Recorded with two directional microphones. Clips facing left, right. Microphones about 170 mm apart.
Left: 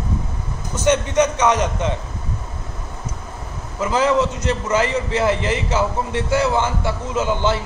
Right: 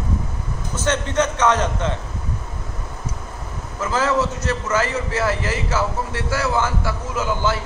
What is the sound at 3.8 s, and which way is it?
A man's voice, 15° left (ahead or behind).